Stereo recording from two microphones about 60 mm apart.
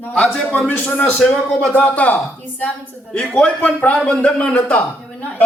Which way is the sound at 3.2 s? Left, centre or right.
Centre.